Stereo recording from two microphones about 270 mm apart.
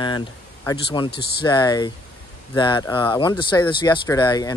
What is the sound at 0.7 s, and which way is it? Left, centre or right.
Speech, centre.